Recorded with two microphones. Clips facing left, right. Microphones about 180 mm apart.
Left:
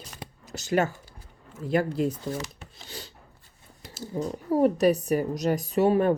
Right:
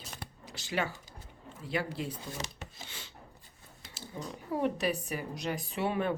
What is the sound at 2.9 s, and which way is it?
Filing, 40° left (ahead or behind).